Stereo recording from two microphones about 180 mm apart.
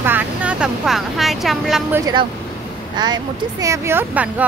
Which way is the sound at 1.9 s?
20° right (ahead or behind).